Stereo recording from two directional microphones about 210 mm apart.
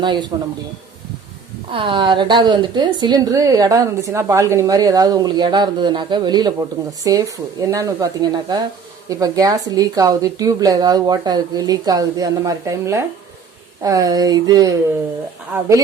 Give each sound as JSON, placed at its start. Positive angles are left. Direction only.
{"t": 0.0, "sound": "a woman's voice", "side_deg": -20}
{"t": 1.7, "sound": "a woman's voice", "side_deg": -25}